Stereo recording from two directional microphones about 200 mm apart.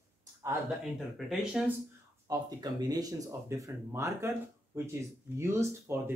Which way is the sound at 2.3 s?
20° right (ahead or behind).